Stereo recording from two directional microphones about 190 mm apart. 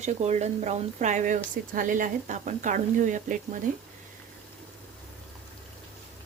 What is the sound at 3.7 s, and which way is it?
Speech, 45° right (ahead or behind).